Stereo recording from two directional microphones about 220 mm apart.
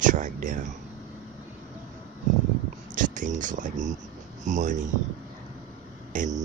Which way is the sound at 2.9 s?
35° right (ahead or behind).